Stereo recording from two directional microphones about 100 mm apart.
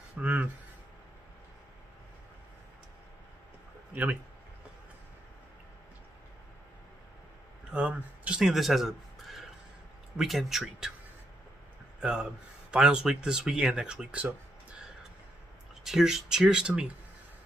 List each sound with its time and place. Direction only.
0.2 s speech: 15° right (ahead or behind)
3.9 s speech: 15° right (ahead or behind)
7.7 s speech: 15° right (ahead or behind)
12.0 s speech: 10° right (ahead or behind)
15.8 s speech: 5° right (ahead or behind)